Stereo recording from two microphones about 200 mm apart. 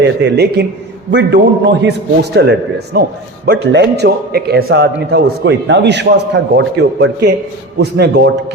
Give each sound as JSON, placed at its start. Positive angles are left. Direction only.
{"t": 0.0, "sound": "a man's voice", "side_deg": -60}